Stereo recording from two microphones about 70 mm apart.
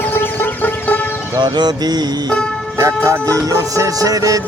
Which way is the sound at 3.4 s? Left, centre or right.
Right.